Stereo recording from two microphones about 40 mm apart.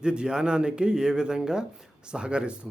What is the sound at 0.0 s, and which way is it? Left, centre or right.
Speech, right.